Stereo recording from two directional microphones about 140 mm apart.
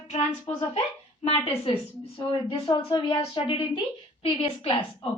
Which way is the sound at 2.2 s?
30° left (ahead or behind).